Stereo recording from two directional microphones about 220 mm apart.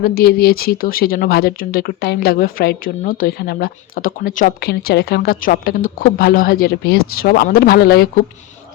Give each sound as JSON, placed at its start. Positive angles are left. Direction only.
{"t": 0.0, "sound": "speech", "side_deg": 45}